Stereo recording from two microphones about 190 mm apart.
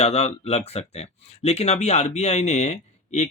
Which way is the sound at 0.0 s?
35° left (ahead or behind).